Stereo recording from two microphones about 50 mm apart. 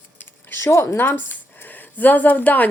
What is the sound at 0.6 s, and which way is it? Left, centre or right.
Speech, left.